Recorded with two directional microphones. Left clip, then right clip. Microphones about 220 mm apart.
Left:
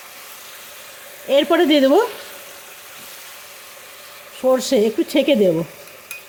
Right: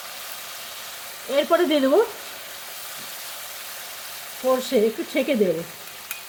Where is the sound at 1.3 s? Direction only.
30° left (ahead or behind).